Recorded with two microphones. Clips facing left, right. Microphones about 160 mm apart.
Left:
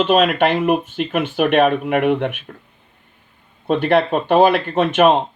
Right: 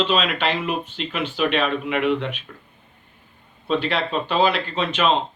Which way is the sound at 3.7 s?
55° left (ahead or behind).